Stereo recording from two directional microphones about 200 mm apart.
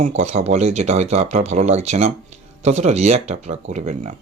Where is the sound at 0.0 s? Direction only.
35° right (ahead or behind).